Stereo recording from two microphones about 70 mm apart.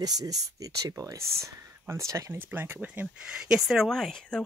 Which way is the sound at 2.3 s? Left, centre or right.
Right.